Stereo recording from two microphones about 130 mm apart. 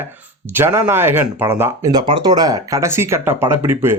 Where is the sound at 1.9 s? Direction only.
35° right (ahead or behind); by 4.0 s 20° right (ahead or behind).